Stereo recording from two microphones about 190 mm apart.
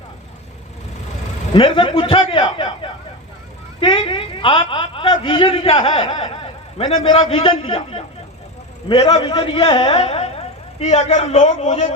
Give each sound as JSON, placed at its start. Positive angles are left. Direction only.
{"t": 1.5, "sound": "a man's voice", "side_deg": 30}